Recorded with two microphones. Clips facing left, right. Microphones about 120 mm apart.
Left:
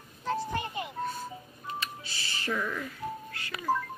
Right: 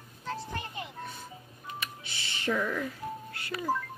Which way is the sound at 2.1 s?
20° right (ahead or behind).